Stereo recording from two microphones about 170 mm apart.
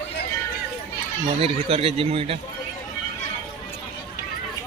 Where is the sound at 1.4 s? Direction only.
35° right (ahead or behind).